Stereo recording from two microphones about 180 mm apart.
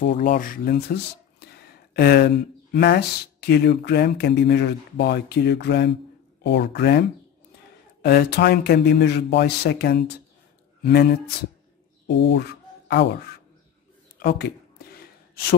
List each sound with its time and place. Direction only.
0.0 s speech: 50° left (ahead or behind)
12.1 s speech: 80° left
14.2 s a sound: 60° left (ahead or behind)